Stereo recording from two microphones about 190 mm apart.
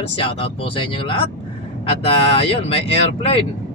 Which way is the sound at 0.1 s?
30° left (ahead or behind).